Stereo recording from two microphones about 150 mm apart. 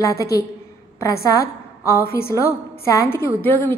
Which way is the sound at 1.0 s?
20° left (ahead or behind).